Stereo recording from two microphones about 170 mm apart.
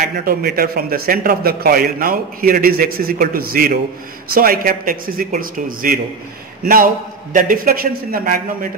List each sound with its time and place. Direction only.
0.2 s a man's voice: 65° right (ahead or behind)